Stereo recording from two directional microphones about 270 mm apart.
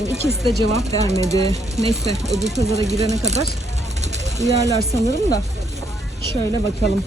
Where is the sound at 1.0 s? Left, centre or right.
Right.